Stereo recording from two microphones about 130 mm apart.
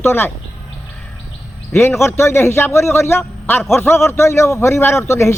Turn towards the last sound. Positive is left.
turn(degrees=20)  # may be behind; listen again after turning